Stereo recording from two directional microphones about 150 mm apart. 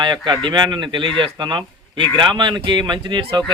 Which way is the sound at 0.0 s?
30° right (ahead or behind).